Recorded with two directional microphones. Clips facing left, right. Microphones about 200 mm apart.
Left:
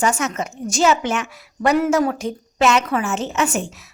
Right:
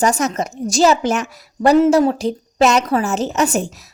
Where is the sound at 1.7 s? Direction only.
25° right (ahead or behind).